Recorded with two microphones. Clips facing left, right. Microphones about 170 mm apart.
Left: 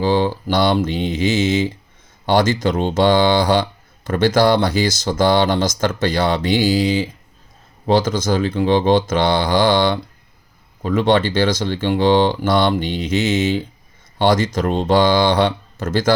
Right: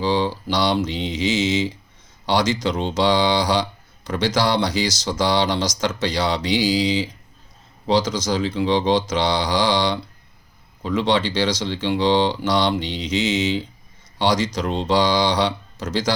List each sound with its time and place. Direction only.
0.0 s speech: 50° left (ahead or behind)